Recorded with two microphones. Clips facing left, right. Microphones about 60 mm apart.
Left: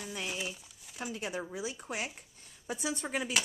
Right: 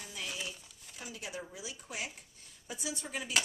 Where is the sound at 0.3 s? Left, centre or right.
Centre.